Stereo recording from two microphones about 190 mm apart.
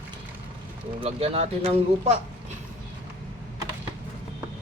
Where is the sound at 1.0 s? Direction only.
30° right (ahead or behind).